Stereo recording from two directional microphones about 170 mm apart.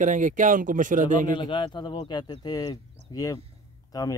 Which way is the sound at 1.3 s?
30° left (ahead or behind).